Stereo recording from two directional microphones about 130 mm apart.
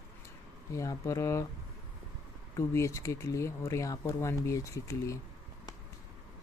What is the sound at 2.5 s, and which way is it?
Speech, 25° left (ahead or behind).